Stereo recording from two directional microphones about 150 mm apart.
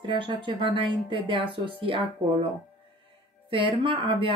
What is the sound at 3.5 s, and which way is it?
Speech, 35° right (ahead or behind).